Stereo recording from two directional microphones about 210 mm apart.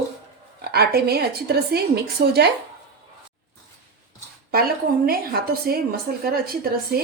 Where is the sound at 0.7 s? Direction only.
50° right (ahead or behind).